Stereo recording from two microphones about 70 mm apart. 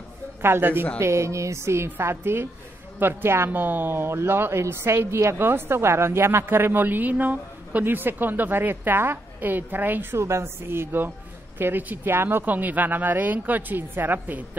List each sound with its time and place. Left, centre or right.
0.4 s speech: right
0.9 s a woman's voice: right
10.1 s speech: right